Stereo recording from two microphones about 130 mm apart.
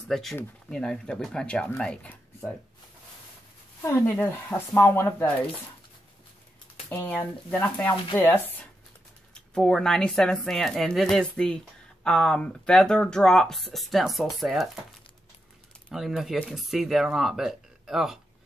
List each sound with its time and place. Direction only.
0.1 s speech: centre (ahead or behind)
3.8 s speech: 20° left (ahead or behind)
6.9 s speech: 15° left (ahead or behind)
9.3 s speech: 5° left (ahead or behind)
15.9 s speech: centre (ahead or behind)